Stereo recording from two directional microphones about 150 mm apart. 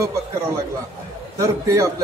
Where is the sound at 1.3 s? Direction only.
20° right (ahead or behind).